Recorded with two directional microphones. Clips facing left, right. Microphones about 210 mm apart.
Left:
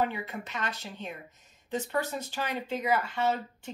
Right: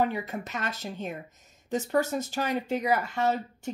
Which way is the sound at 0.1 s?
40° right (ahead or behind).